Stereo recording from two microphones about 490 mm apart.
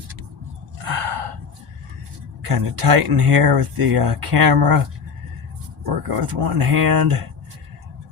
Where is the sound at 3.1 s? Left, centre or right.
Right.